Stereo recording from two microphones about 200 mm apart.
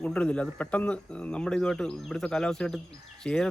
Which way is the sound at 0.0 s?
5° left (ahead or behind).